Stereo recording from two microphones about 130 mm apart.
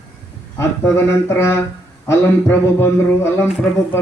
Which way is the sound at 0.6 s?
20° left (ahead or behind).